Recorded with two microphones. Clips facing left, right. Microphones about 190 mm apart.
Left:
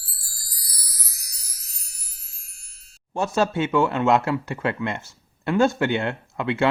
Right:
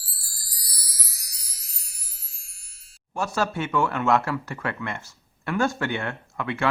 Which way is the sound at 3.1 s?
25° left (ahead or behind).